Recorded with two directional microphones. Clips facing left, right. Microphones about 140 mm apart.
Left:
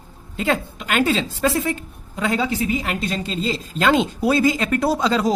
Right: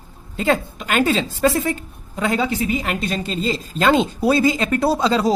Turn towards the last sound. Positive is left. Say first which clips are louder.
# right 2 dB
turn(degrees=-30)  # may be behind; listen again after turning